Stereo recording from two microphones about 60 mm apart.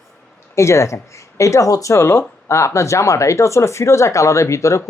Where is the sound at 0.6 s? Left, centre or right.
Left.